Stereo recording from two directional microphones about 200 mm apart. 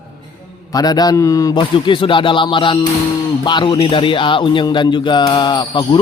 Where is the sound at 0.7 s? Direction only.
20° left (ahead or behind).